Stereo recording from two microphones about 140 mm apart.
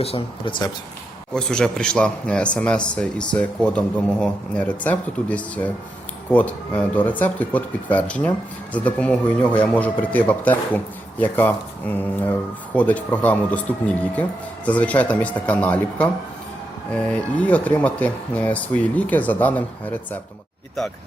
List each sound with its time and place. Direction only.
0.0 s speech: 40° left (ahead or behind)
1.3 s speech: 5° left (ahead or behind)